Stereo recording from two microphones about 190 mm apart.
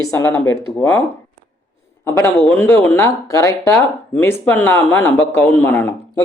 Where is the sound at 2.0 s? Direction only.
15° left (ahead or behind).